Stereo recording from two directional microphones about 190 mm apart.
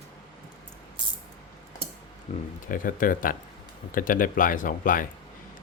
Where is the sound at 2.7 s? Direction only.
45° left (ahead or behind).